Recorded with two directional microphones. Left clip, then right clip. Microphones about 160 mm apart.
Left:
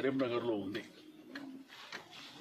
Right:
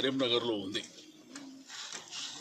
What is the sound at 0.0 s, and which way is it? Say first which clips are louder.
Speech: right 4 dB; 10° right (ahead or behind).